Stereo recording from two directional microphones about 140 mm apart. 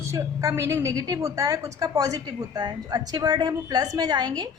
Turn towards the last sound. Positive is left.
turn(degrees=-30)  # may be behind; listen again after turning